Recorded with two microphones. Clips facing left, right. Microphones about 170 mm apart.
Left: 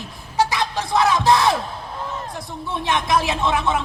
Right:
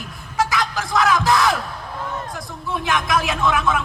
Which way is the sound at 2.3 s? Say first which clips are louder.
Right 1 dB; 25° left (ahead or behind).